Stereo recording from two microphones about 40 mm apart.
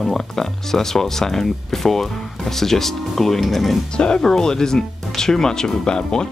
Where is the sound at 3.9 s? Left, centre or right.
Left.